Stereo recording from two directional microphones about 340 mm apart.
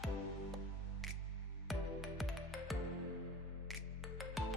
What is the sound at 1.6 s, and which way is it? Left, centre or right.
Music, centre.